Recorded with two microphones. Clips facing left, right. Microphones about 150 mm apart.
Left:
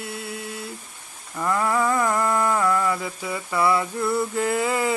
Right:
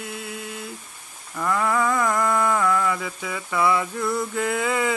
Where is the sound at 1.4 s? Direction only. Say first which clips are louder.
Even; 10° left (ahead or behind).